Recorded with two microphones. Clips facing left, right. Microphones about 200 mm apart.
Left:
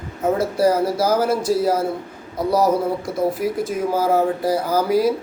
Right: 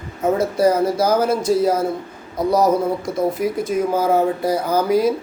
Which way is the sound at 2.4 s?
5° left (ahead or behind).